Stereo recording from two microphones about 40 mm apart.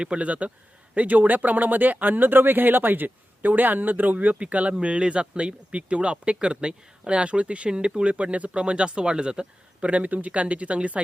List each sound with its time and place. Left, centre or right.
0.0 s speech: right
8.0 s speech: right
9.9 s speech: right